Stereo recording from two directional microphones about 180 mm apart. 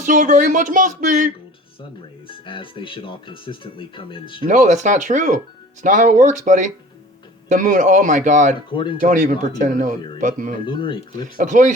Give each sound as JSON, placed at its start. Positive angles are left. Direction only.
{"t": 0.0, "sound": "speech", "side_deg": -45}
{"t": 2.2, "sound": "speech", "side_deg": 30}
{"t": 4.4, "sound": "speech", "side_deg": -45}
{"t": 8.7, "sound": "speech", "side_deg": 25}
{"t": 9.0, "sound": "speech", "side_deg": -45}
{"t": 10.7, "sound": "speech", "side_deg": 25}
{"t": 11.3, "sound": "speech", "side_deg": -45}